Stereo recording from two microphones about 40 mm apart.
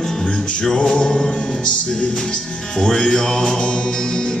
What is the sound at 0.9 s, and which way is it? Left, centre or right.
Music, centre.